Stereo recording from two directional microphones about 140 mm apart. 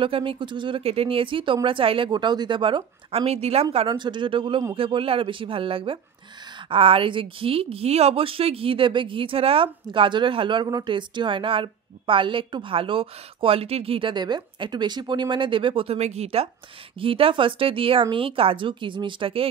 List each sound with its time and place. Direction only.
0.0 s a woman's voice: 40° right (ahead or behind)
3.7 s a woman's voice: 35° right (ahead or behind)